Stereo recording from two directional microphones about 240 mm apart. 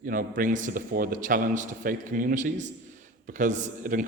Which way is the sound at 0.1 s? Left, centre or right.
Right.